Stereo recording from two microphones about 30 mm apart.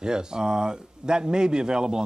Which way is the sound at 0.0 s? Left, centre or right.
Right.